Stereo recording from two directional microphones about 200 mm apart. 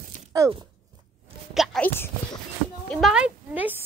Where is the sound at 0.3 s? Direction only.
20° right (ahead or behind).